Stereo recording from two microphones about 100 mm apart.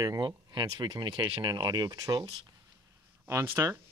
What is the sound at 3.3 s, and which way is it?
Speech, 25° right (ahead or behind).